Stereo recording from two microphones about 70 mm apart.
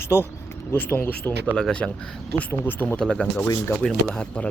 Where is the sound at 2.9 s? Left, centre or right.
Centre.